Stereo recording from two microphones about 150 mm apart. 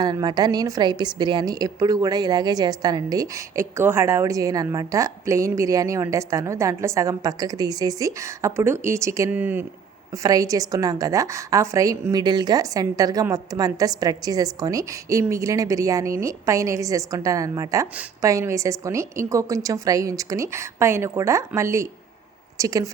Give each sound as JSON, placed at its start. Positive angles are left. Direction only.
{"t": 0.0, "sound": "a woman's voice", "side_deg": -25}
{"t": 10.2, "sound": "a woman's voice", "side_deg": -25}